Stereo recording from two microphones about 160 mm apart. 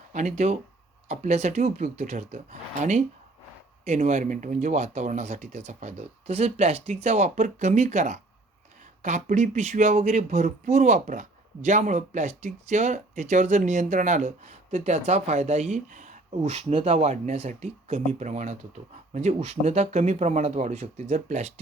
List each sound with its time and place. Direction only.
0.1 s speech: 50° right (ahead or behind)